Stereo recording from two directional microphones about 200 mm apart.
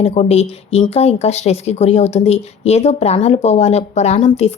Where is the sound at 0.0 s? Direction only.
30° left (ahead or behind).